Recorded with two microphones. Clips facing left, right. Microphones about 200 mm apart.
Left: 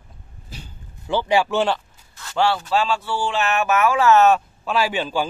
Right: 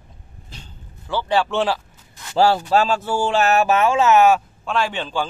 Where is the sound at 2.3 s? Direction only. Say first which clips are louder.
Right 4 dB; 35° right (ahead or behind).